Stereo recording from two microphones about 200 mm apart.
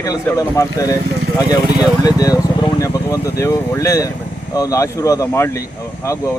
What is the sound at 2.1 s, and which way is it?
Speech, 20° left (ahead or behind).